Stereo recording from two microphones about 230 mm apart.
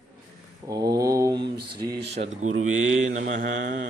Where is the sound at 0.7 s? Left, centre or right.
Centre.